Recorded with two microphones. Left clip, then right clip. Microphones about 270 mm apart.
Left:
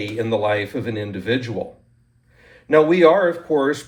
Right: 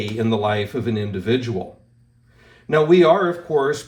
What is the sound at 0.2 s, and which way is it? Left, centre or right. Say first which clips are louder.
Speech: left 1 dB; right.